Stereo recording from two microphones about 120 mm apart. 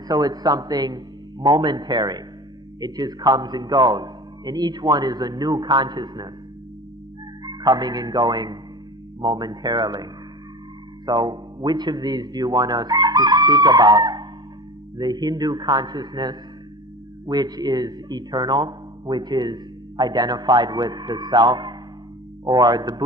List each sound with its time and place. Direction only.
0.1 s a man's voice: 35° right (ahead or behind)
7.4 s a man's voice: 35° right (ahead or behind)